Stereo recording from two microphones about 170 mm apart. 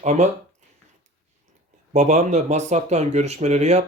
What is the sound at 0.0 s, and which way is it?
Speech, 45° right (ahead or behind).